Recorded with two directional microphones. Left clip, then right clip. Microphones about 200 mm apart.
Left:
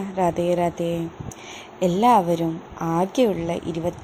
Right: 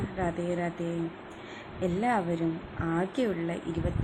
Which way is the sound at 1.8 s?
25° left (ahead or behind).